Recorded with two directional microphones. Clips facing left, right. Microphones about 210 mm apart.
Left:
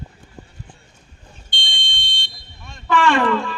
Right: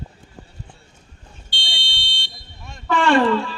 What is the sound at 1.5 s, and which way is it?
Fire alarm, 20° left (ahead or behind).